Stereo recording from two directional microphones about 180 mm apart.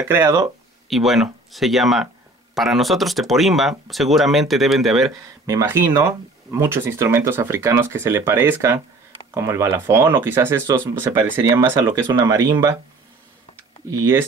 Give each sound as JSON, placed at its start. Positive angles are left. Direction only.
{"t": 0.0, "sound": "speech", "side_deg": -15}
{"t": 0.8, "sound": "speech", "side_deg": 0}
{"t": 5.1, "sound": "speech", "side_deg": -15}
{"t": 13.8, "sound": "speech", "side_deg": -15}